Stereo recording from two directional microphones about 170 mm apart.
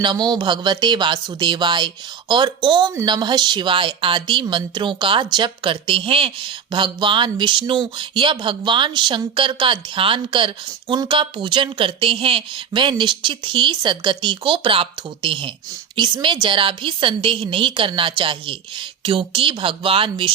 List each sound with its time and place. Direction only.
0.0 s a woman's voice: 25° right (ahead or behind)